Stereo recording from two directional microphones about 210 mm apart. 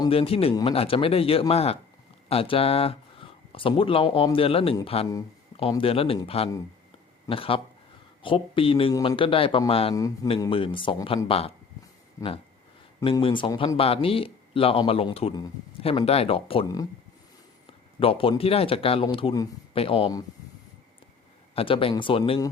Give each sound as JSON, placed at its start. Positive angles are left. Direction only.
{"t": 0.0, "sound": "speech", "side_deg": 25}
{"t": 13.0, "sound": "speech", "side_deg": 20}
{"t": 18.0, "sound": "speech", "side_deg": 25}
{"t": 21.5, "sound": "speech", "side_deg": 25}